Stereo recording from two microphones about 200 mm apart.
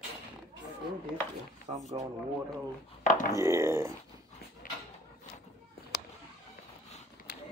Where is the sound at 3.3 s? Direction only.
15° right (ahead or behind).